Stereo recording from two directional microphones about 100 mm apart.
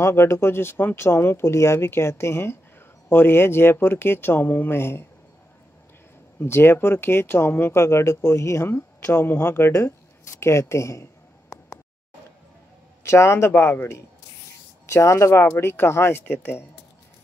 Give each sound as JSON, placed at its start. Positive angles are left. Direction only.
{"t": 0.0, "sound": "speech", "side_deg": 25}
{"t": 6.4, "sound": "speech", "side_deg": 25}
{"t": 13.0, "sound": "speech", "side_deg": 25}